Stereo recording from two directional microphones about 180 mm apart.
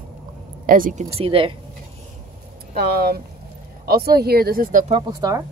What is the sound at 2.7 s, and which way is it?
Speech, 60° right (ahead or behind).